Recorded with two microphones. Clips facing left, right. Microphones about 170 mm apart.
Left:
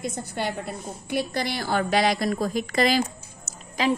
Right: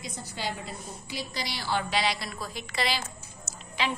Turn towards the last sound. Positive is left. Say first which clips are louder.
# left 7 dB
turn(degrees=40)  # may be behind; listen again after turning